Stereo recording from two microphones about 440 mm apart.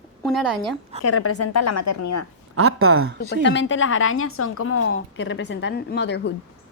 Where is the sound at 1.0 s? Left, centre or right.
Left.